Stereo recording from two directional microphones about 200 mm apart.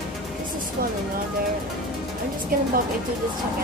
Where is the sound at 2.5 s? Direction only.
45° right (ahead or behind).